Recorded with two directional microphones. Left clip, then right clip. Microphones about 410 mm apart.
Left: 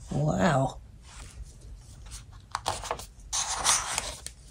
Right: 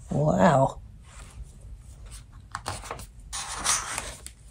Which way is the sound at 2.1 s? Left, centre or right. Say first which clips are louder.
Left 2 dB; centre.